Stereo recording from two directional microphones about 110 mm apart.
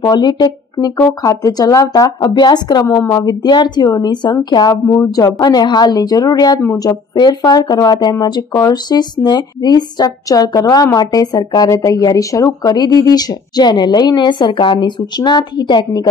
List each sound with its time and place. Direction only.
0.0 s speech: 40° left (ahead or behind)
4.8 s speech: 20° left (ahead or behind)
5.1 s speech: 35° left (ahead or behind)